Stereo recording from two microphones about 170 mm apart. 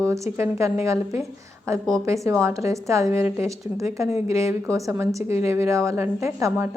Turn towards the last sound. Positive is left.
turn(degrees=-15)  # may be behind; listen again after turning